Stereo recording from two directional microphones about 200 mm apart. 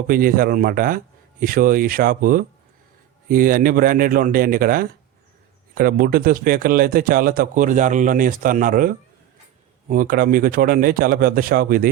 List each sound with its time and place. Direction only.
0.1 s a man's voice: 45° right (ahead or behind)
9.9 s a man's voice: 45° right (ahead or behind)